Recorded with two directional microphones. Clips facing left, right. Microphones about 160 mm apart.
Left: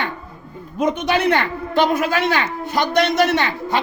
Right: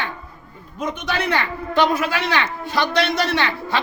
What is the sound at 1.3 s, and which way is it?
A woman's voice, 50° left (ahead or behind).